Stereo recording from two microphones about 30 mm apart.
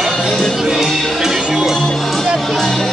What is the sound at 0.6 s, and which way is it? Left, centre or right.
Music, centre.